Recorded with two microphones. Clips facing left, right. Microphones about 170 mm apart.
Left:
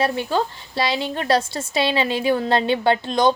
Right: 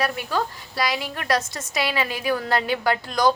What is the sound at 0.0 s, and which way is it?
A woman's voice, 25° left (ahead or behind).